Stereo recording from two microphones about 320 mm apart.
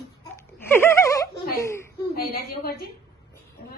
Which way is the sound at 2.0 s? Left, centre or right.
Left.